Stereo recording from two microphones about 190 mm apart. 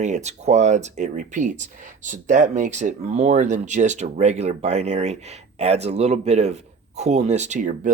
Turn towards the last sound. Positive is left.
turn(degrees=-40)  # may be behind; listen again after turning